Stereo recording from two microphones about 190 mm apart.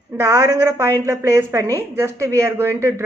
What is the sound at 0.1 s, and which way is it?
A woman's voice, 15° right (ahead or behind).